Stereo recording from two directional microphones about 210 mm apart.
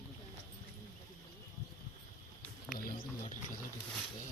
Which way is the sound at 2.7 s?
45° left (ahead or behind).